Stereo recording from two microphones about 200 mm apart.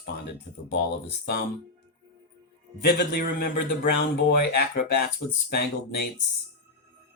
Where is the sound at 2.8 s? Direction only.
55° left (ahead or behind).